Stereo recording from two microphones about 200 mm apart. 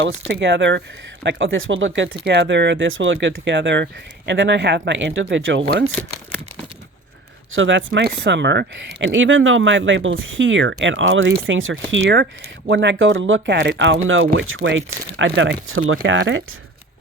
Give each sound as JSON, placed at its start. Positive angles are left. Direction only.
{"t": 0.0, "sound": "speech", "side_deg": -65}
{"t": 2.2, "sound": "speech", "side_deg": -60}
{"t": 7.5, "sound": "speech", "side_deg": -70}